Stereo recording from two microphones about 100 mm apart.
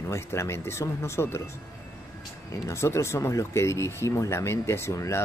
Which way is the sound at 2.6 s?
30° left (ahead or behind).